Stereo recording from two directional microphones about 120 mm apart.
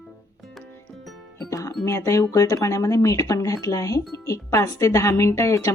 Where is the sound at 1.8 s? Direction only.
25° left (ahead or behind).